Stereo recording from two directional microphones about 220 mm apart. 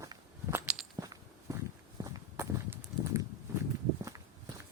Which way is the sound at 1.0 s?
15° right (ahead or behind).